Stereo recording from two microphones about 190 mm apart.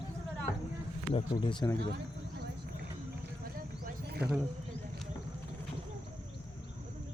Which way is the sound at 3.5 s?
50° right (ahead or behind).